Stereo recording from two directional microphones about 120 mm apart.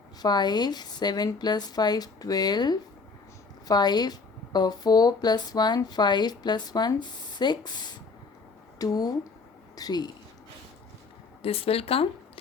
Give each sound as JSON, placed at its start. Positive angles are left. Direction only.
{"t": 0.2, "sound": "speech", "side_deg": 35}
{"t": 11.4, "sound": "speech", "side_deg": 55}